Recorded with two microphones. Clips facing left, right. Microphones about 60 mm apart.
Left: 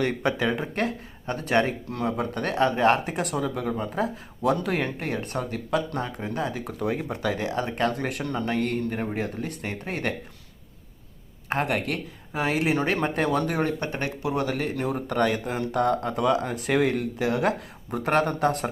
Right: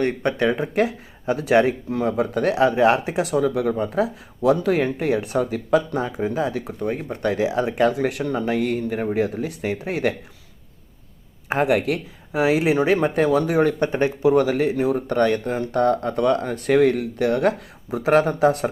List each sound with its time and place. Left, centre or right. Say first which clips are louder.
0.0 s speech: right 4 dB; centre
11.4 s speech: right 6 dB; centre
13.7 s speech: right 9 dB; right
14.3 s speech: right 8 dB; centre